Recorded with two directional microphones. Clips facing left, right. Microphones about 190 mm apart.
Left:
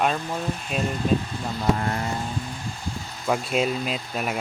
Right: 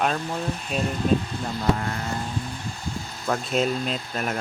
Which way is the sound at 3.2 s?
5° left (ahead or behind).